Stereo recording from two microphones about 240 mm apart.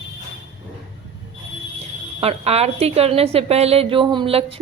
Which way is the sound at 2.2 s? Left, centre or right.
Right.